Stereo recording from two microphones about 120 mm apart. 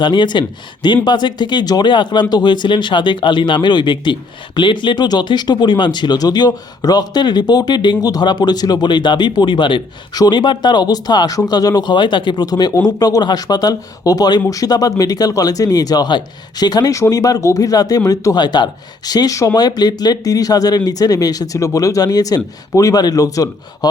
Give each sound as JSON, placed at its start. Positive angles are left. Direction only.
{"t": 0.0, "sound": "speech", "side_deg": 40}